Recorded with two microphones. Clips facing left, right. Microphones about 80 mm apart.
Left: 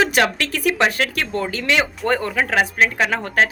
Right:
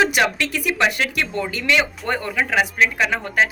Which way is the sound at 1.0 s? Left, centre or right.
Left.